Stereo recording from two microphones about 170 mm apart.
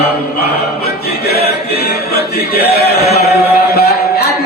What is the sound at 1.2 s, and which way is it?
Music, 70° left (ahead or behind).